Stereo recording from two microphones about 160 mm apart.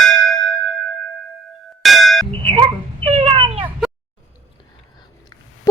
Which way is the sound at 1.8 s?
Centre (ahead or behind).